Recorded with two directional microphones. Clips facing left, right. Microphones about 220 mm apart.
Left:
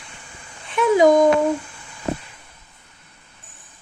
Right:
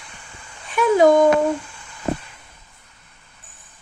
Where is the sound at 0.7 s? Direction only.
20° left (ahead or behind).